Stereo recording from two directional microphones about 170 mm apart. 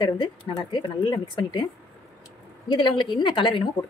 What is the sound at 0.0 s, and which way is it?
A woman's voice, 25° left (ahead or behind).